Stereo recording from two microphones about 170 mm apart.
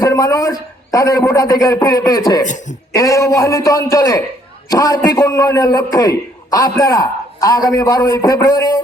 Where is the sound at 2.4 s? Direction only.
45° left (ahead or behind).